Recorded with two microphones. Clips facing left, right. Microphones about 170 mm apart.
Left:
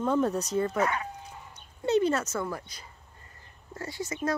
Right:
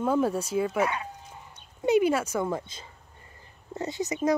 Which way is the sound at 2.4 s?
25° right (ahead or behind).